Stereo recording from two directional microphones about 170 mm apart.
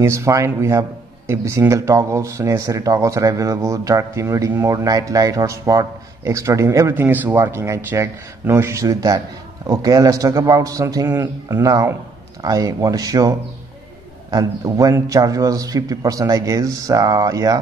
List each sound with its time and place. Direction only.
0.0 s a man's voice: 15° right (ahead or behind)